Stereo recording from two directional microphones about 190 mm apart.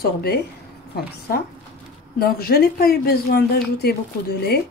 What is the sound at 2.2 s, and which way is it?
A woman's voice, 55° left (ahead or behind).